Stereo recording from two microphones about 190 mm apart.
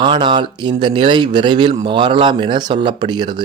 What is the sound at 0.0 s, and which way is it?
Speech, 25° right (ahead or behind).